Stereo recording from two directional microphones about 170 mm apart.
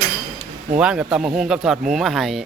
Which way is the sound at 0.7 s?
5° right (ahead or behind).